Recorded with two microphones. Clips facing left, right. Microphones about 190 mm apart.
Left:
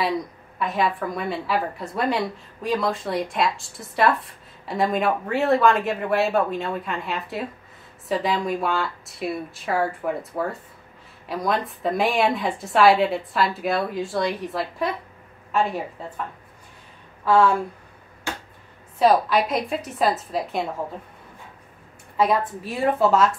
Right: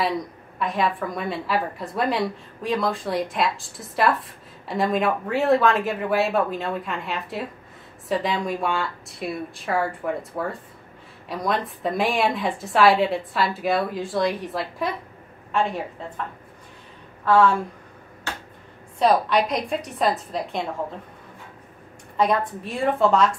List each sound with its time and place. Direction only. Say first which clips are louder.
0.6 s a woman's voice: even; centre (ahead or behind)
17.2 s speech: even; 10° left (ahead or behind)
18.9 s a woman's voice: left 1 dB; centre (ahead or behind)
22.1 s a woman's voice: left 1 dB; 5° left (ahead or behind)